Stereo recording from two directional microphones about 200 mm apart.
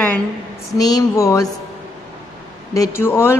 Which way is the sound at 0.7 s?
20° left (ahead or behind).